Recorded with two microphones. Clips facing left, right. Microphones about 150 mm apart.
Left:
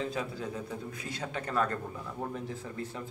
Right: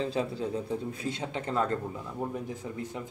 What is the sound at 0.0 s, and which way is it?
A man's voice, 30° right (ahead or behind).